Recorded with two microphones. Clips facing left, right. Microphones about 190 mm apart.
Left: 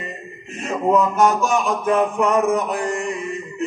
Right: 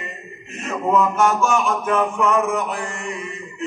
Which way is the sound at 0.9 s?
35° left (ahead or behind).